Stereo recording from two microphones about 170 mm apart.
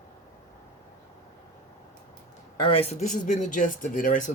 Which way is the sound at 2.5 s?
30° left (ahead or behind).